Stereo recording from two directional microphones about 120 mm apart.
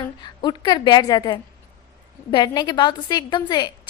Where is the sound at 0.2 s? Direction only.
35° left (ahead or behind).